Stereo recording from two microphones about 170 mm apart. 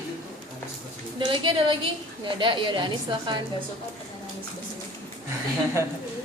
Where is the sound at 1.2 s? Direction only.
30° right (ahead or behind).